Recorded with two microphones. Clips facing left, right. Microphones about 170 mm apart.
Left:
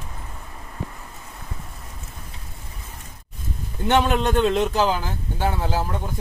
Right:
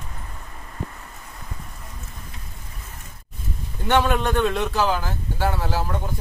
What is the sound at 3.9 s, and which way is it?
A man's voice, 20° left (ahead or behind).